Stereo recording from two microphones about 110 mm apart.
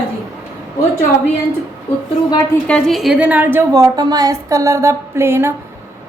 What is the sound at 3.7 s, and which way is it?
A woman's voice, 35° right (ahead or behind).